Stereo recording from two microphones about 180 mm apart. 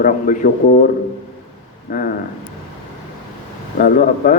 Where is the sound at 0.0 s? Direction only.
50° left (ahead or behind).